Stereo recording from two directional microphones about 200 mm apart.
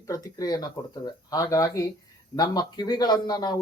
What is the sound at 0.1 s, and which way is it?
Speech, 15° left (ahead or behind).